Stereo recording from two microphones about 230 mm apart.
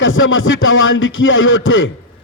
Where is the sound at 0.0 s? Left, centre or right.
Left.